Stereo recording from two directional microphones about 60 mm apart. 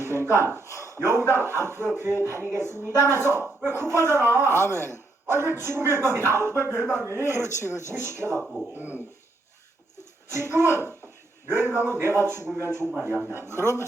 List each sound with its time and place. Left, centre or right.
0.0 s a sound: right
1.3 s a man's voice: right
8.4 s speech: centre
8.7 s speech: right
10.0 s a man's voice: right